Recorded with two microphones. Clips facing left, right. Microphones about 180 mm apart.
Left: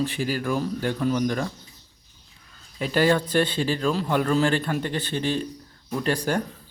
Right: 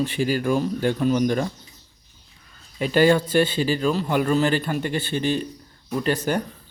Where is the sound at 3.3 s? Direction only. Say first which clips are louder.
Right 3 dB; 5° right (ahead or behind).